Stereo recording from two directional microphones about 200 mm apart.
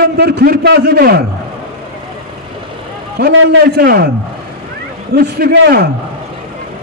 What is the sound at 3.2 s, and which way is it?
Speech, 55° right (ahead or behind).